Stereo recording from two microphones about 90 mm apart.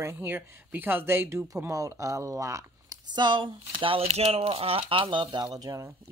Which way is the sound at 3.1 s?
60° right (ahead or behind).